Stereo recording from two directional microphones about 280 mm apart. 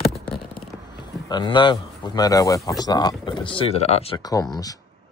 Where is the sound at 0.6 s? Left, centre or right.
Centre.